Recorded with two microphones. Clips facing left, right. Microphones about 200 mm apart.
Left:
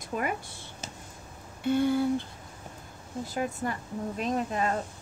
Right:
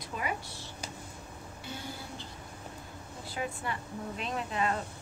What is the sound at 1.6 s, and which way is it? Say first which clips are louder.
Speech: left 19 dB; 60° left (ahead or behind).